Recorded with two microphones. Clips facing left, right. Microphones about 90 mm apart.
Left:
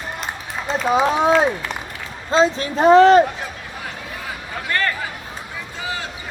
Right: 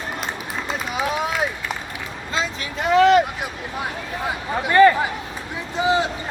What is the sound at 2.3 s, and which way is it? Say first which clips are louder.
Speech: left 10 dB; 35° left (ahead or behind).